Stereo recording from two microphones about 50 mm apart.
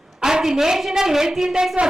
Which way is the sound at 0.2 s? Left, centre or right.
Centre.